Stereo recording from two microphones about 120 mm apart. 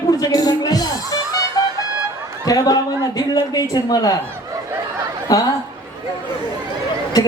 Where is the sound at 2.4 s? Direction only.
30° left (ahead or behind).